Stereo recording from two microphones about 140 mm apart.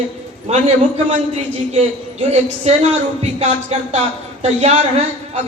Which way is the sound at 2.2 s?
50° right (ahead or behind).